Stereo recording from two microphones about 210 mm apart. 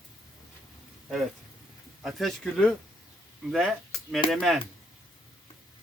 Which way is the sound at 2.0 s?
Centre (ahead or behind).